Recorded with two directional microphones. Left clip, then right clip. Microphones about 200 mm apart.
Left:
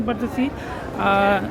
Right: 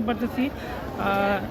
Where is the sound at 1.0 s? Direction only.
25° left (ahead or behind).